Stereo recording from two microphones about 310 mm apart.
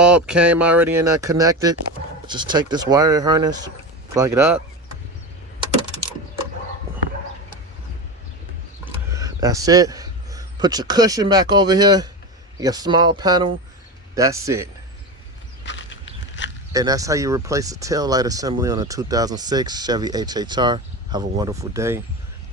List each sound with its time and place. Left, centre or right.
0.0 s speech: centre
8.8 s speech: centre
15.6 s a sound: left
16.7 s speech: centre